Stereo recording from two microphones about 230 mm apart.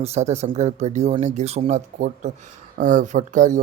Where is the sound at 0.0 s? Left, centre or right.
Right.